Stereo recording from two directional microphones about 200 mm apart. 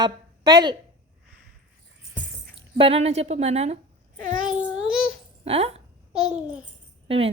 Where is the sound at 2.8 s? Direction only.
30° right (ahead or behind).